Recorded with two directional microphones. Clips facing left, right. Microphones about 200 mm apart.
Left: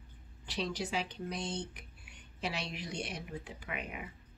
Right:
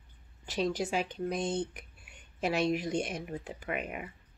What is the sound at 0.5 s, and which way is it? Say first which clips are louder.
Speech: right 6 dB; 45° right (ahead or behind).